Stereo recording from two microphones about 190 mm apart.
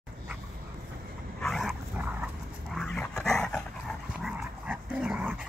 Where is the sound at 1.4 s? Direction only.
Centre (ahead or behind).